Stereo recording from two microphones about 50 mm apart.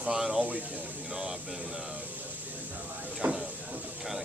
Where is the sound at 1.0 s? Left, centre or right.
Centre.